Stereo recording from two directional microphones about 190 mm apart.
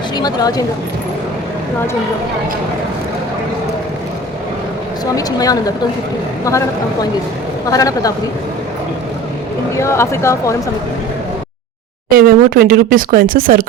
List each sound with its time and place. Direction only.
0.2 s speech: 20° left (ahead or behind)
5.1 s speech: 20° left (ahead or behind)
9.7 s speech: 15° left (ahead or behind)
12.1 s speech: 50° right (ahead or behind)